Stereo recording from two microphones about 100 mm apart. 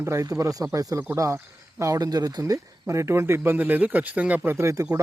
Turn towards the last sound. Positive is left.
turn(degrees=-30)  # may be behind; listen again after turning